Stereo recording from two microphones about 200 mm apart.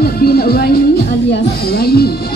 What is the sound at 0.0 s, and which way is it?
Music, 50° left (ahead or behind).